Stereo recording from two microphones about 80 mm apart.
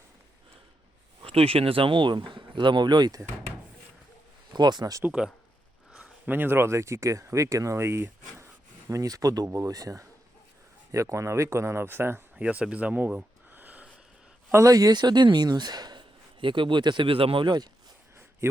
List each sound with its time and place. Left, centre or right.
1.8 s speech: right
4.5 s speech: right
5.2 s speech: centre
6.2 s speech: right
8.9 s speech: right
12.4 s a sound: centre
14.5 s speech: right